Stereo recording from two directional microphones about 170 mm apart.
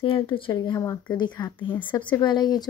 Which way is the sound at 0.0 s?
30° left (ahead or behind).